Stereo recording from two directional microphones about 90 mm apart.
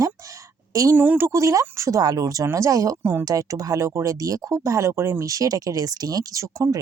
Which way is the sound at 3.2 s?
40° right (ahead or behind).